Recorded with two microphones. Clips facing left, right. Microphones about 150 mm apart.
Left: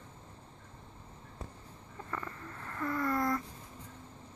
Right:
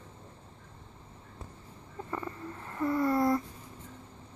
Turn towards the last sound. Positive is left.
turn(degrees=-25)  # may be behind; listen again after turning